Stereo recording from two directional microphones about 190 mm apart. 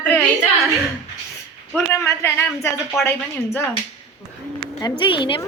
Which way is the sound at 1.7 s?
15° left (ahead or behind).